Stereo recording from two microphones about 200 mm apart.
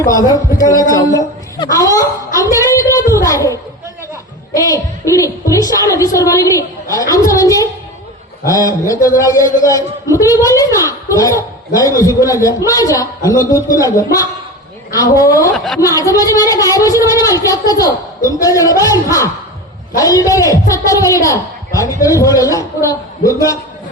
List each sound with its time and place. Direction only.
0.0 s a woman's voice: 20° left (ahead or behind)
4.5 s a man's voice: 15° left (ahead or behind)
15.5 s a woman's voice: centre (ahead or behind)
15.8 s a man's voice: 20° left (ahead or behind)
20.0 s a man's voice: 15° left (ahead or behind)